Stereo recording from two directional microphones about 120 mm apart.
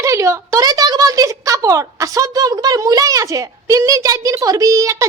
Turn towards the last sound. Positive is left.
turn(degrees=-25)  # may be behind; listen again after turning